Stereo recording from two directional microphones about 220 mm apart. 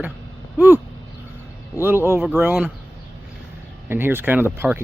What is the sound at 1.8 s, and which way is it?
Speech, 10° right (ahead or behind).